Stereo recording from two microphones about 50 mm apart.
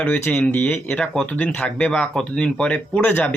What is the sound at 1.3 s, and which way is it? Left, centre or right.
Speech, left.